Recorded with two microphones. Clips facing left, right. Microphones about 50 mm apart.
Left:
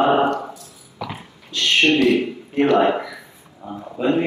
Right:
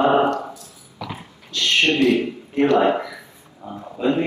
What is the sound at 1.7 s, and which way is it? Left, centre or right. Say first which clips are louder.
Speech: left 2 dB; left.